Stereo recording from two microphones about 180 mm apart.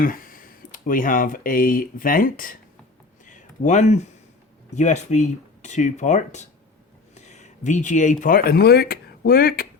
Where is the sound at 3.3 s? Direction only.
45° left (ahead or behind).